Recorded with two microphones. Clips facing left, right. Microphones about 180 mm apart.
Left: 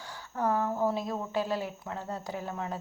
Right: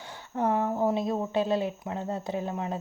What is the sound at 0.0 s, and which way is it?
Speech, 20° right (ahead or behind).